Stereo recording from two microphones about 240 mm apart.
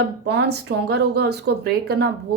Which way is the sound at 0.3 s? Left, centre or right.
Right.